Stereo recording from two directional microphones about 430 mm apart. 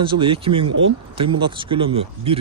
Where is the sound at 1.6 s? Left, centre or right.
Centre.